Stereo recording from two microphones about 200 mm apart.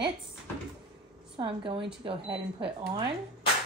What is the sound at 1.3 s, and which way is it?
A woman's voice, 25° right (ahead or behind).